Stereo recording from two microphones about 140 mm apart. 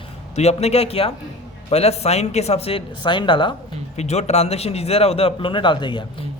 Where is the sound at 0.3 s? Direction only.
50° left (ahead or behind).